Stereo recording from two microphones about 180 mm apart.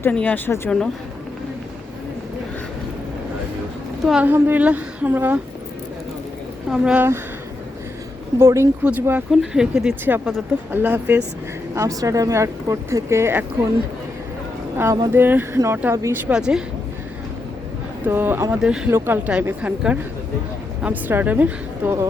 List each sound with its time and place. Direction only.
0.0 s speech: 10° left (ahead or behind)
4.0 s speech: 5° right (ahead or behind)
6.7 s speech: 5° right (ahead or behind)
8.4 s speech: 15° right (ahead or behind)
14.8 s speech: 15° right (ahead or behind)
16.3 s speech: 5° right (ahead or behind)
18.0 s speech: 10° right (ahead or behind)